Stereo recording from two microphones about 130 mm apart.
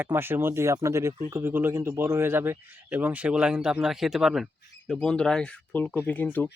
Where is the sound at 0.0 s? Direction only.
15° right (ahead or behind); by 6.5 s 15° left (ahead or behind).